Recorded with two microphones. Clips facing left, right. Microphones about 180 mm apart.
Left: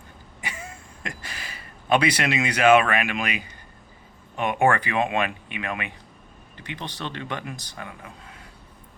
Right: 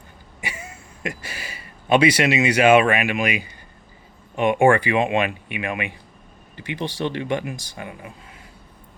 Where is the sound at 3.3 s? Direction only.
10° right (ahead or behind).